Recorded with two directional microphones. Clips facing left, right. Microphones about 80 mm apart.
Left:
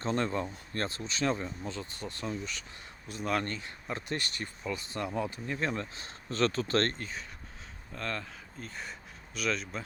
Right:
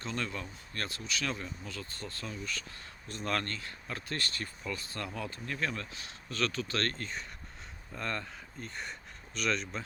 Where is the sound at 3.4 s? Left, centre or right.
Centre.